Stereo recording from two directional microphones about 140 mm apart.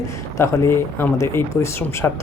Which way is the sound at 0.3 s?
20° left (ahead or behind).